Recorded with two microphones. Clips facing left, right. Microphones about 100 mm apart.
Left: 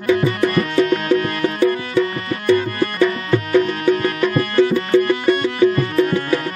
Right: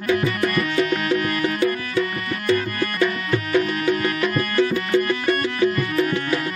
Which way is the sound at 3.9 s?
35° left (ahead or behind).